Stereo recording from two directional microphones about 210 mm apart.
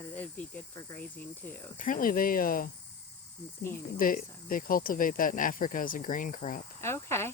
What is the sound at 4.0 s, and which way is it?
Speech, 40° left (ahead or behind).